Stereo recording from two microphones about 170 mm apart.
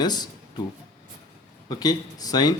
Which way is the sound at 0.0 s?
25° left (ahead or behind).